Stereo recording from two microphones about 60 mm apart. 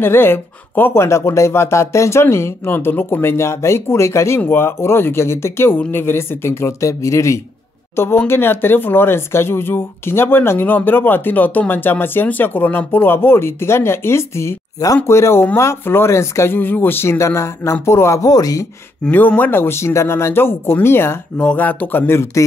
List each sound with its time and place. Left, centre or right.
0.0 s speech: left
1.0 s speech: left
6.9 s speech: left
7.9 s speech: left
16.5 s speech: left
18.2 s speech: left
19.0 s speech: left
21.5 s speech: left